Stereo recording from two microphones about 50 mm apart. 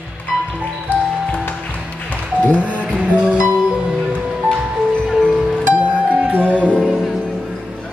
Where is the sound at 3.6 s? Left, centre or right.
Centre.